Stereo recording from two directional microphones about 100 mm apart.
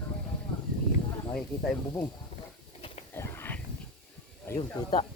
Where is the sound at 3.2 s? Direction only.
25° left (ahead or behind).